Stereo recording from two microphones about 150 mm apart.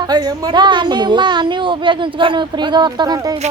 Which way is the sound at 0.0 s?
30° right (ahead or behind).